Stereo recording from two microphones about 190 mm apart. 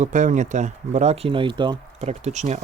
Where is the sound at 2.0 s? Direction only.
35° right (ahead or behind).